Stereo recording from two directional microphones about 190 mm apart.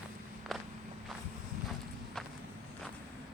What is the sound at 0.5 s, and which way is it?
Walk, centre (ahead or behind).